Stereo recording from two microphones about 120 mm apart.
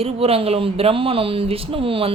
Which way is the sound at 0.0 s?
55° right (ahead or behind).